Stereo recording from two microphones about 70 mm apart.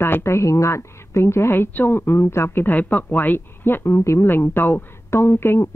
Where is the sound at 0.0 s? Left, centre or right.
Left.